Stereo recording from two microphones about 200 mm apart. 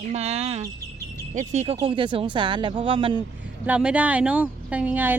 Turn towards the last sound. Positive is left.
turn(degrees=-10)  # may be behind; listen again after turning